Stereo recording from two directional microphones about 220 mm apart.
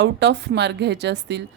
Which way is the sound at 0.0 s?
50° right (ahead or behind).